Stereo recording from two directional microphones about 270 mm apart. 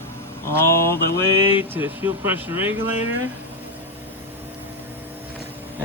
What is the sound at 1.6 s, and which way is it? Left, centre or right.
Speech, centre.